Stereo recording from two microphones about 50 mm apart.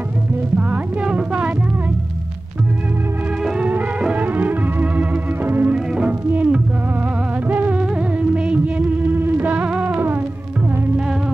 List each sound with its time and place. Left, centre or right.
1.0 s music: right
4.1 s music: right
5.7 s music: right
9.5 s music: right